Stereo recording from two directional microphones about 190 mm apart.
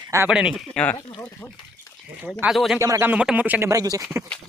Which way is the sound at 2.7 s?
15° right (ahead or behind).